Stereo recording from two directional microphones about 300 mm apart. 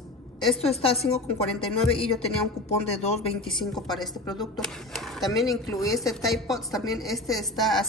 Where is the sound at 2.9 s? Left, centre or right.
Centre.